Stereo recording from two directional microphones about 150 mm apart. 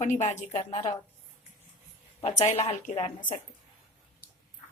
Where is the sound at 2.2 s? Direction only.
45° left (ahead or behind).